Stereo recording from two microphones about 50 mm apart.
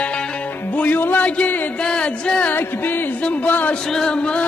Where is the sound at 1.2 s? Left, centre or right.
Left.